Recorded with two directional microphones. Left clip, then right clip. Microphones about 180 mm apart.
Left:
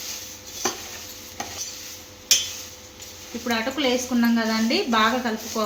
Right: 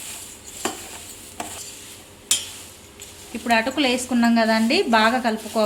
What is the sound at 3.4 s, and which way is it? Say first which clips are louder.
A woman's voice: right 4 dB; 70° right (ahead or behind).